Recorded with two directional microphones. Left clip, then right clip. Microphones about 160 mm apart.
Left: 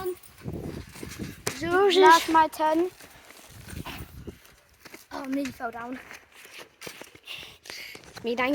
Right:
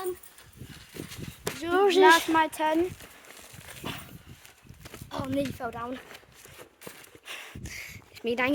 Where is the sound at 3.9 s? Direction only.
20° right (ahead or behind).